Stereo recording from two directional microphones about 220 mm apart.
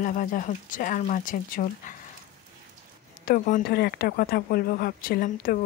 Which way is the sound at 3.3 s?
40° left (ahead or behind).